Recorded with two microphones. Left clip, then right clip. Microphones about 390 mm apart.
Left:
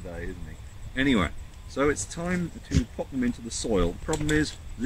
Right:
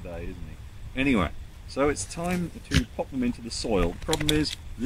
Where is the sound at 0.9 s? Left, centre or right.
Centre.